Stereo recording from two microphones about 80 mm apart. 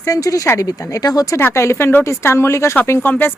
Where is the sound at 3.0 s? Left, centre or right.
Left.